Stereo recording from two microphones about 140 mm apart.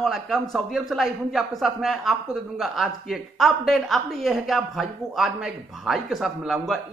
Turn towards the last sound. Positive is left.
turn(degrees=0)  # may be behind; listen again after turning